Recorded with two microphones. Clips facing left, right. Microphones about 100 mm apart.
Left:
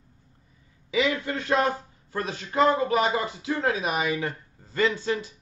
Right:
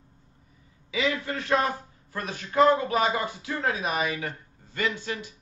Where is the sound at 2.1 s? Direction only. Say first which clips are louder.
Right 1 dB; 25° left (ahead or behind).